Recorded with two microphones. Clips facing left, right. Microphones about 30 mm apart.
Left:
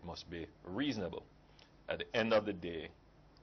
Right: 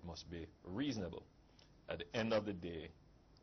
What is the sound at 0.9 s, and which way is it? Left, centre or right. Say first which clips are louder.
Speech: left 4 dB; left.